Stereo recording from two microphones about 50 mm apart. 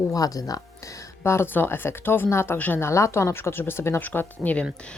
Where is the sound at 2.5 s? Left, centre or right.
Left.